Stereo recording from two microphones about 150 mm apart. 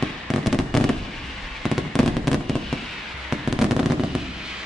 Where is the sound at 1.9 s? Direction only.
Centre (ahead or behind).